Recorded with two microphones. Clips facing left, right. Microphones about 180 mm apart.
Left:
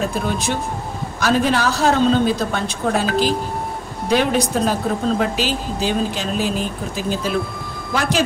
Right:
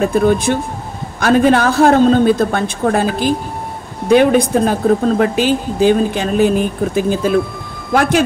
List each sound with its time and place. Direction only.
0.0 s speech: 55° right (ahead or behind)